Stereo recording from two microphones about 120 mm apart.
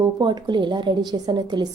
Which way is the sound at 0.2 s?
40° right (ahead or behind).